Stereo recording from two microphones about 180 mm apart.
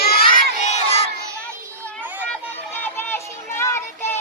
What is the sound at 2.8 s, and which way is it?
Child singing, 10° left (ahead or behind).